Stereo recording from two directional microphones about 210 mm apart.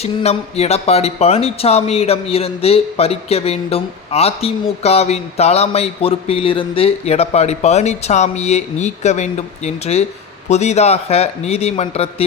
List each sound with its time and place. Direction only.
0.0 s a man's voice: 30° left (ahead or behind)